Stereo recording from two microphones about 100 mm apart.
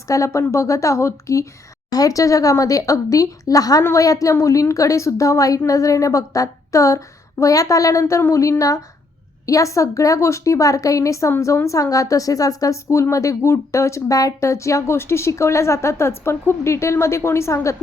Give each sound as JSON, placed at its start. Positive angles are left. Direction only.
{"t": 0.1, "sound": "a woman's voice", "side_deg": 30}